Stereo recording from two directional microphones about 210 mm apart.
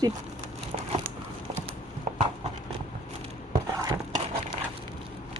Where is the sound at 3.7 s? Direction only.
15° right (ahead or behind).